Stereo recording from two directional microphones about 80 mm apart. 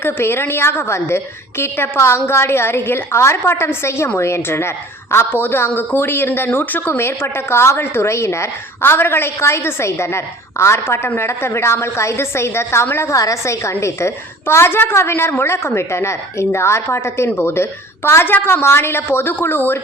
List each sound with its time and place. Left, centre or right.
0.0 s a woman's voice: left